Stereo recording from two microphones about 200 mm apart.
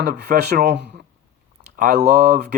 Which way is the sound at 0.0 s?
50° right (ahead or behind).